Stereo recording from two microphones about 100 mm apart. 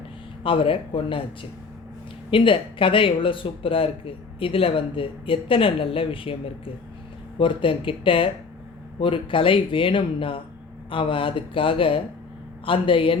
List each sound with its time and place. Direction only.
0.4 s speech: 60° left (ahead or behind)